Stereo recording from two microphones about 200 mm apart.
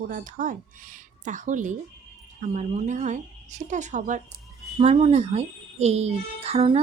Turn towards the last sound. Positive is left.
turn(degrees=-30)  # may be behind; listen again after turning